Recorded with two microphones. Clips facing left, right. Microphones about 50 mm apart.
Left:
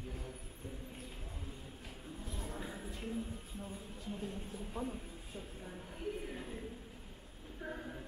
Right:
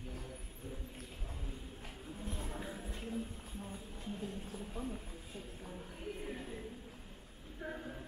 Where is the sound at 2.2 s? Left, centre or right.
Right.